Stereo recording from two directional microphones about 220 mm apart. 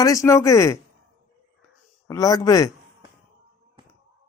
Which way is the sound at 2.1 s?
15° left (ahead or behind).